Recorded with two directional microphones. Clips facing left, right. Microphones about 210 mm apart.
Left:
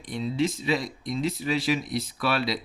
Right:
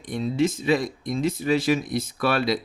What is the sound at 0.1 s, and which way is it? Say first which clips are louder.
Speech: right 3 dB; 50° right (ahead or behind).